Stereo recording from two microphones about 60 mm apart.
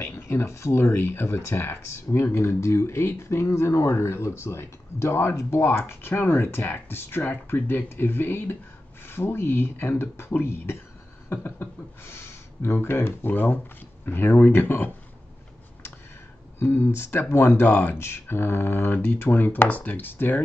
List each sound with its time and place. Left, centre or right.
0.0 s a sound: left
0.5 s speech: left
16.5 s speech: left
17.9 s speech: left